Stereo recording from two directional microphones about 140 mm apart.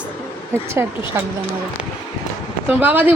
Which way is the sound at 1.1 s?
15° right (ahead or behind).